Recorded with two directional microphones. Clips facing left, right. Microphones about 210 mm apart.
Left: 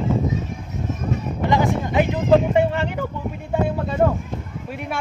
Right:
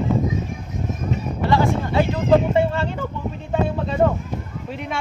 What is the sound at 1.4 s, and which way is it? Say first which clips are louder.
Music: right 1 dB; 15° left (ahead or behind).